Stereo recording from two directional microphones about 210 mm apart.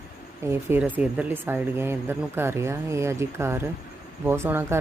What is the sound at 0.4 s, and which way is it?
Speech, 10° right (ahead or behind).